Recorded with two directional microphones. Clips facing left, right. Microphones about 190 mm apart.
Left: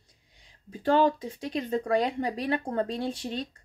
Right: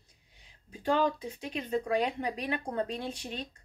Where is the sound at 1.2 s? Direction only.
40° left (ahead or behind).